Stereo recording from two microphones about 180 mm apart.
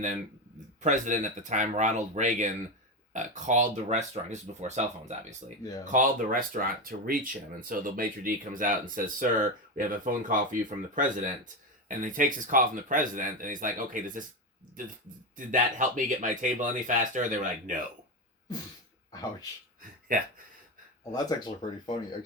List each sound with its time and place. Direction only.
0.8 s speech: 45° right (ahead or behind)
15.4 s speech: 45° right (ahead or behind)
20.1 s speech: 50° right (ahead or behind)
21.1 s speech: 20° left (ahead or behind)